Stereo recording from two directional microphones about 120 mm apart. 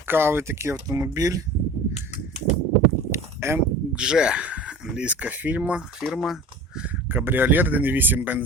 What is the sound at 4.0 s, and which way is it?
Speech, 5° right (ahead or behind).